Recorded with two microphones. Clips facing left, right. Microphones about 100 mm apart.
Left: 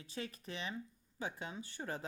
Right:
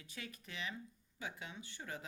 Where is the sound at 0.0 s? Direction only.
30° left (ahead or behind).